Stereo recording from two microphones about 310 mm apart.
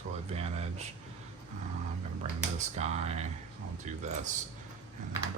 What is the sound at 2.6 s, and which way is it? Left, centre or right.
Speech, right.